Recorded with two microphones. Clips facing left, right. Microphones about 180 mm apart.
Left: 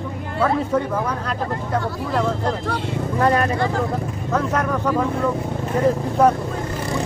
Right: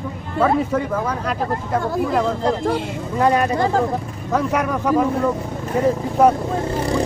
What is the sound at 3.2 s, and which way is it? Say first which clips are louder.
Speech: right 2 dB; 10° right (ahead or behind).